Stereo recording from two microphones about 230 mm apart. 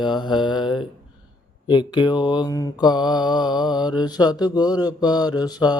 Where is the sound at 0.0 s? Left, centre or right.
Centre.